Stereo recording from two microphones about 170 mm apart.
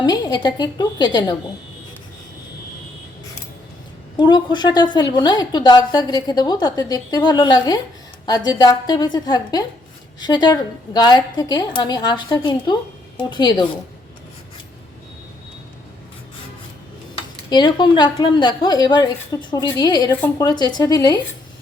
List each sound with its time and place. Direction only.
0.0 s a woman's voice: 25° left (ahead or behind)
4.2 s a woman's voice: 25° left (ahead or behind)
17.5 s a woman's voice: 25° left (ahead or behind)